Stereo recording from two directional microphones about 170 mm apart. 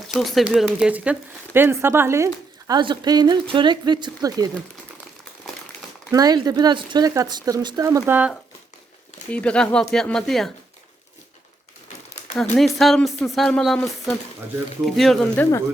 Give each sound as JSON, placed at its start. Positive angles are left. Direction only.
{"t": 0.1, "sound": "a woman's voice", "side_deg": 0}
{"t": 6.1, "sound": "a woman's voice", "side_deg": -20}
{"t": 9.3, "sound": "speech", "side_deg": 5}
{"t": 12.5, "sound": "speech", "side_deg": 0}